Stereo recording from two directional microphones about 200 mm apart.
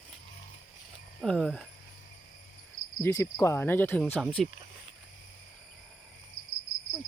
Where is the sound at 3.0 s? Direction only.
10° left (ahead or behind).